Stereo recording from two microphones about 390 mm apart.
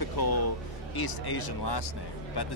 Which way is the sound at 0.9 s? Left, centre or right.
Left.